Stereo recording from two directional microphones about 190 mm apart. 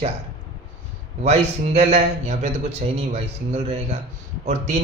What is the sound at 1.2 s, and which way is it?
A man's voice, 35° right (ahead or behind).